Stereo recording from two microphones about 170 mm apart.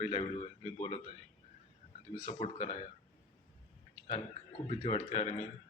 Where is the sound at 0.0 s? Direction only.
30° left (ahead or behind).